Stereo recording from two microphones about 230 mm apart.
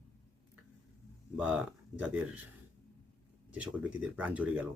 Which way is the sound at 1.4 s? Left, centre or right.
Centre.